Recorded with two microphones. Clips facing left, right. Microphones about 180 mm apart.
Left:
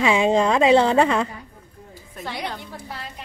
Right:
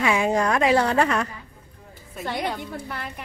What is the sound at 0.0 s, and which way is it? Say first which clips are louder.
Speech: left 3 dB; 25° left (ahead or behind).